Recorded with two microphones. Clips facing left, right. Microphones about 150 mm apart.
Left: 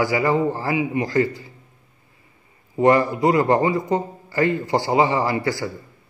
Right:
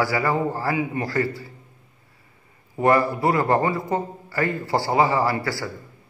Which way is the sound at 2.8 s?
20° left (ahead or behind).